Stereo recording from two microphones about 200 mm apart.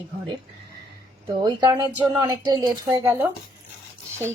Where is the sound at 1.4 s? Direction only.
20° right (ahead or behind).